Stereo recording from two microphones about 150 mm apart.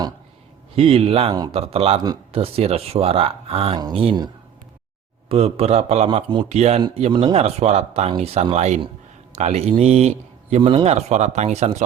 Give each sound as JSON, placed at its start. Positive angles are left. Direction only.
{"t": 0.8, "sound": "speech", "side_deg": -40}
{"t": 3.8, "sound": "speech", "side_deg": -25}
{"t": 5.3, "sound": "a man's voice", "side_deg": -40}
{"t": 7.1, "sound": "speech", "side_deg": -30}
{"t": 7.3, "sound": "a man's voice", "side_deg": -45}